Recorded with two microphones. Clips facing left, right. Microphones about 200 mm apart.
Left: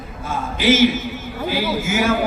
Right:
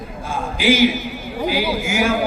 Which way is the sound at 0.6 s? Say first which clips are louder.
Left 1 dB; 15° right (ahead or behind).